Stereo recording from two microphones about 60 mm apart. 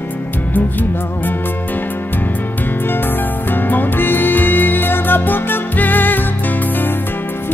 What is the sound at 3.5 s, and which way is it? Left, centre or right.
Music, left.